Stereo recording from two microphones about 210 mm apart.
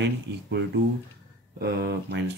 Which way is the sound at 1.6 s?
45° right (ahead or behind).